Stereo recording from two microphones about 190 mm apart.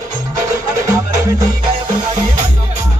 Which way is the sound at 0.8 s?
20° right (ahead or behind).